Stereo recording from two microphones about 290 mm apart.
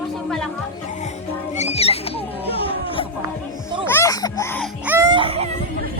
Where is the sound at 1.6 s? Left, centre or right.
Left.